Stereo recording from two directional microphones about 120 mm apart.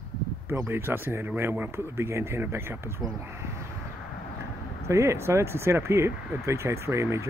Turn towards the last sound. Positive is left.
turn(degrees=-25)  # may be behind; listen again after turning